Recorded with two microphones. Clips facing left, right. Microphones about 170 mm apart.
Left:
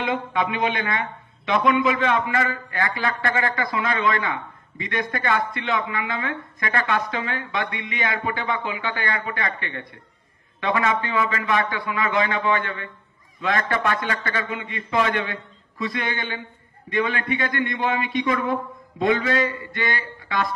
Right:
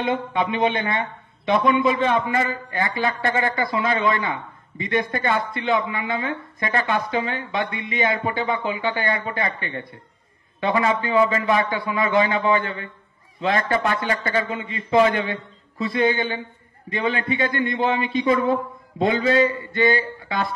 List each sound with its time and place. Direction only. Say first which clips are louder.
0.0 s speech: right 1 dB; 25° right (ahead or behind)